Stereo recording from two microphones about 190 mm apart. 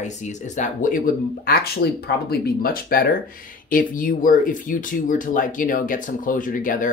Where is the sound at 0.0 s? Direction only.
40° left (ahead or behind).